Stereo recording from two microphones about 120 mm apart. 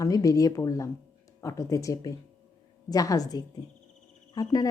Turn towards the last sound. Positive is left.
turn(degrees=30)  # may be behind; listen again after turning